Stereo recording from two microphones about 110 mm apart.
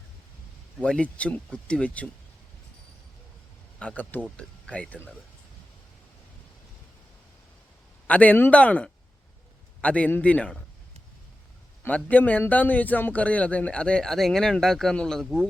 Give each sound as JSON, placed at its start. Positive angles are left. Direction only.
{"t": 0.8, "sound": "a man's voice", "side_deg": 10}
{"t": 3.8, "sound": "a man's voice", "side_deg": 10}
{"t": 8.0, "sound": "a man's voice", "side_deg": 15}
{"t": 11.8, "sound": "a man's voice", "side_deg": 15}